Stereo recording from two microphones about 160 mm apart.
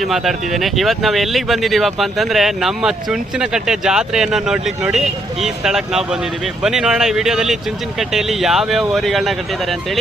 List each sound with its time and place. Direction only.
0.0 s speech: centre (ahead or behind)